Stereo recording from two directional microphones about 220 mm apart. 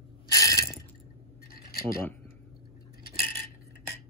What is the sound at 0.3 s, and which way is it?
Mechanisms, 15° left (ahead or behind).